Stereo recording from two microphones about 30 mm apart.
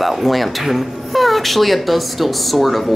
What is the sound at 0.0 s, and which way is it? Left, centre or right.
Speech, centre.